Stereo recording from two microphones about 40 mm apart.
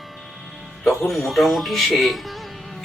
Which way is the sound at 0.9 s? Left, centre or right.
Centre.